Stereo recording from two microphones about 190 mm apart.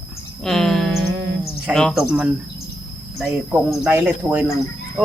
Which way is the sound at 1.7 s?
Centre (ahead or behind).